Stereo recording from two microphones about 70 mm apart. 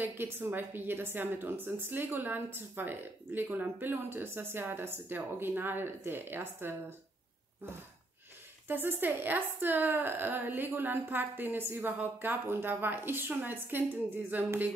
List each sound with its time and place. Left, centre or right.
0.0 s a woman's voice: right
8.6 s a woman's voice: right